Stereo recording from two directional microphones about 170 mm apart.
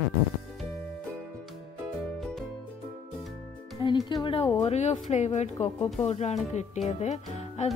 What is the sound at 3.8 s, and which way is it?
Music, 25° left (ahead or behind).